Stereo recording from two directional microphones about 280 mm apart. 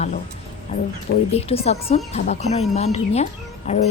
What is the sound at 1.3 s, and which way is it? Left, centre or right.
Speech, left.